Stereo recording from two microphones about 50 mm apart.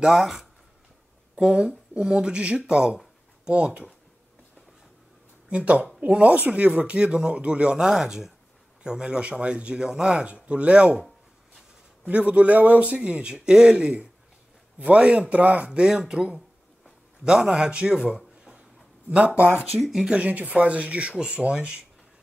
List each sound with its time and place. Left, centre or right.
0.0 s a man's voice: centre
1.3 s speech: right
5.5 s speech: right
12.1 s a man's voice: right
19.0 s speech: right
19.8 s speech: centre
20.2 s speech: right